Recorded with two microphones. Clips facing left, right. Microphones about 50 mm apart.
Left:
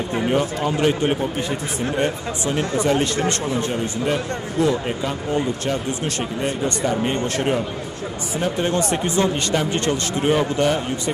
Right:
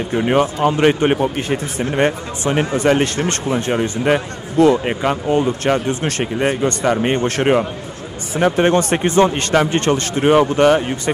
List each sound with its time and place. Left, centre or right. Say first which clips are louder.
0.7 s a man's voice: right 5 dB; right